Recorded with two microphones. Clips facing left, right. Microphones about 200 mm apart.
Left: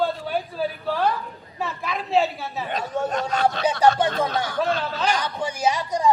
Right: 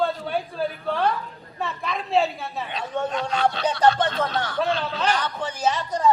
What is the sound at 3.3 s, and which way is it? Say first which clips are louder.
Speech: even; 45° left (ahead or behind).